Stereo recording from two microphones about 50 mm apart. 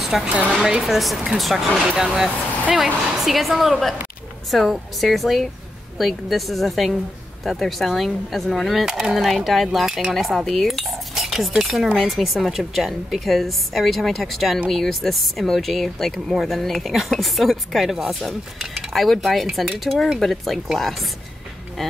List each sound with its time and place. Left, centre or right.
0.2 s speech: right
0.8 s cutlery: centre
2.0 s speech: centre
2.8 s cutlery: centre
8.8 s cutlery: centre